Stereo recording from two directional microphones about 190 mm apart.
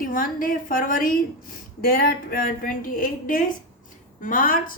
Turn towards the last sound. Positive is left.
turn(degrees=45)  # may be behind; listen again after turning